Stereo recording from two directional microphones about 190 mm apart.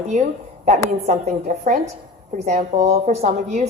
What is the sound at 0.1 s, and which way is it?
A woman's voice, 40° right (ahead or behind).